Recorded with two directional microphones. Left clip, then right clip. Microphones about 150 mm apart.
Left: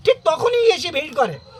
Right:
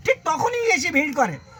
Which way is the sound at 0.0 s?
30° left (ahead or behind).